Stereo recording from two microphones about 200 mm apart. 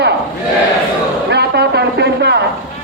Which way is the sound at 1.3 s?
55° right (ahead or behind).